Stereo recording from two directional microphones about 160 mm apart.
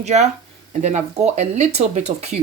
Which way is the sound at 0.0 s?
45° right (ahead or behind).